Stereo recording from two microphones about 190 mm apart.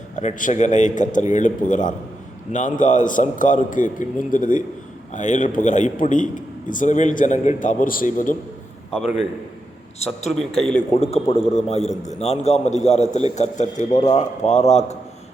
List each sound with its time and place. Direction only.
0.2 s a man's voice: 40° left (ahead or behind)
8.9 s a man's voice: 5° right (ahead or behind)
10.9 s a man's voice: 35° left (ahead or behind)